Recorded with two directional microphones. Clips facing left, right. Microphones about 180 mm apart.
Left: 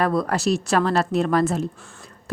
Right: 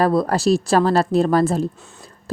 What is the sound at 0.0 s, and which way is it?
Speech, 35° right (ahead or behind).